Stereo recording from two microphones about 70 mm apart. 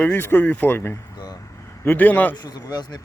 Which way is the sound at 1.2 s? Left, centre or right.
Left.